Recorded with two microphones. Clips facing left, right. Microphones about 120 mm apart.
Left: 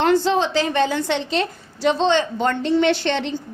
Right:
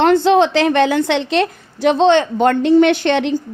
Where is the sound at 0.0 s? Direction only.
60° right (ahead or behind).